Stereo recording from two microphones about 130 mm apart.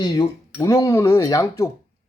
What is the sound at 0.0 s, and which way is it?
Speech, 30° left (ahead or behind).